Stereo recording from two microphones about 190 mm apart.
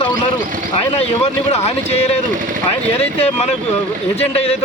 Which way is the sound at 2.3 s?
45° right (ahead or behind).